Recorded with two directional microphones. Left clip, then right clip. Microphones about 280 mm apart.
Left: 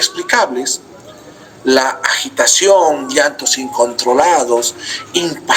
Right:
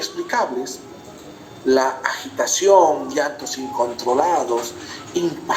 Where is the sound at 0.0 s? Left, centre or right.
Left.